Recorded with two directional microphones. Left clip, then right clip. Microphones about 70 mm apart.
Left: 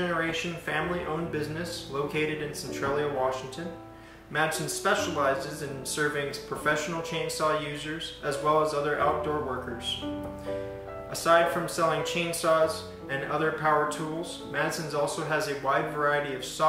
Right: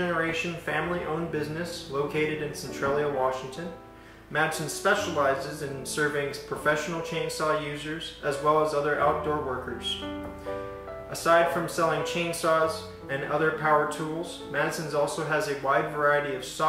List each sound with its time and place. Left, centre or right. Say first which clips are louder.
0.0 s speech: right 1 dB; centre
4.3 s speech: right 1 dB; centre
8.6 s speech: right 2 dB; centre
11.2 s speech: right 1 dB; centre